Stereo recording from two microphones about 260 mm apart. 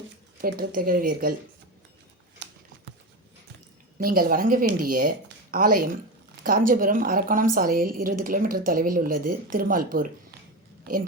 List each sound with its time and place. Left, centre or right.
0.4 s a woman's voice: right
2.4 s a sound: right
3.9 s a woman's voice: right